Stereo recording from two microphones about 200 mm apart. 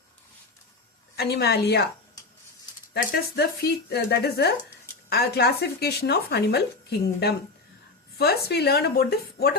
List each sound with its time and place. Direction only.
1.1 s speech: 55° left (ahead or behind)
2.9 s speech: 50° left (ahead or behind)